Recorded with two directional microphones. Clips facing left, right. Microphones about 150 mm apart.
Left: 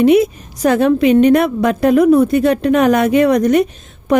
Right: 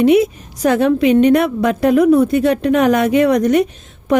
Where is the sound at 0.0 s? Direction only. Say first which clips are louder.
Left 1 dB; 40° left (ahead or behind).